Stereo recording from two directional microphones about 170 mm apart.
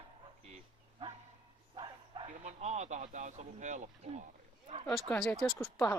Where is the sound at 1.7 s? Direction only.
30° right (ahead or behind).